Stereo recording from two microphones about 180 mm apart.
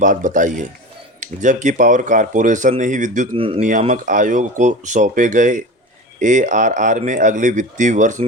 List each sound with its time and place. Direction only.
0.0 s speech: 45° right (ahead or behind)
3.3 s speech: 30° right (ahead or behind)
3.7 s speech: 45° right (ahead or behind)